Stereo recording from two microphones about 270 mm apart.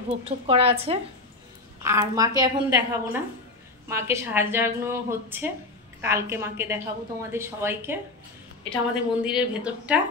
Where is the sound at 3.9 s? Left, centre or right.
Centre.